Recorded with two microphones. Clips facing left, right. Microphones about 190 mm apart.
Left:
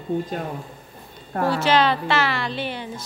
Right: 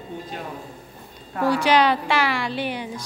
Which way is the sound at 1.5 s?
15° right (ahead or behind).